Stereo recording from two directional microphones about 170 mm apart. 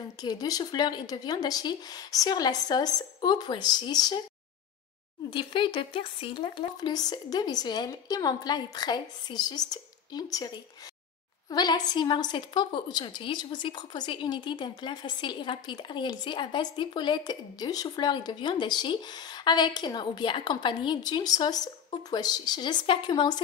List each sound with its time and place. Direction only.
0.2 s a woman's voice: 20° left (ahead or behind)
5.3 s a woman's voice: 30° left (ahead or behind)